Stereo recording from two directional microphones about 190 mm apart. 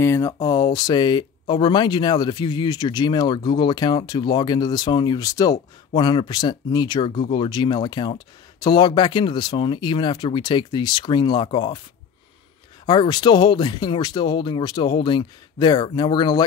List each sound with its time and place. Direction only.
0.0 s speech: 15° left (ahead or behind)
12.8 s speech: 25° left (ahead or behind)